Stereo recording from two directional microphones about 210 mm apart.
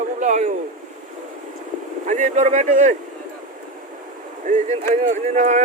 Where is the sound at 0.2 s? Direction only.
35° right (ahead or behind).